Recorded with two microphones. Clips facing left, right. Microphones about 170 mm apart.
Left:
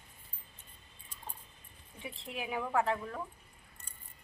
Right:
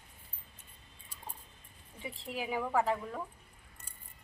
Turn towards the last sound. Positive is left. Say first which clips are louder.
# right 1 dB
turn(degrees=-5)  # may be behind; listen again after turning